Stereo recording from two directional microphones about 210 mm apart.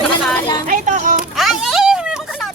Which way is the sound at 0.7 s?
35° right (ahead or behind).